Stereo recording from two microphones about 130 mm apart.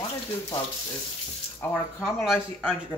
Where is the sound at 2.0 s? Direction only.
Centre (ahead or behind).